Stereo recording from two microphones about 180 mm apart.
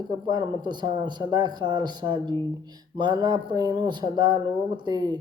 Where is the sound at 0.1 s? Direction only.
20° right (ahead or behind).